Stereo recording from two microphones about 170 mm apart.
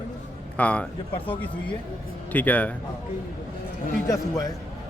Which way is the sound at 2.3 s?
10° left (ahead or behind).